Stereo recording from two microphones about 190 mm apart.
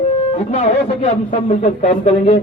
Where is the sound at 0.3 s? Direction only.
35° left (ahead or behind).